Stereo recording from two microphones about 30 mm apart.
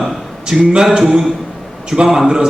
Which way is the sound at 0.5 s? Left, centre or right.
Centre.